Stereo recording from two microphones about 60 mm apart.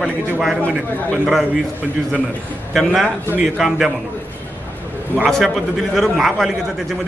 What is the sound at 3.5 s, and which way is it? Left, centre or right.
Speech, centre.